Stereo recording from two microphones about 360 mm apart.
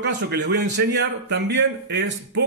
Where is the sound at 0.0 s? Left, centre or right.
Right.